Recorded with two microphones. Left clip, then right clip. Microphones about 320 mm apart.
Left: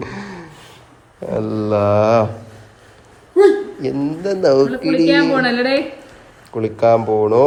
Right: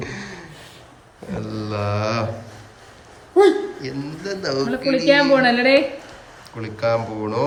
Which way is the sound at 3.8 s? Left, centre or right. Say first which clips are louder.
Left 9 dB; centre.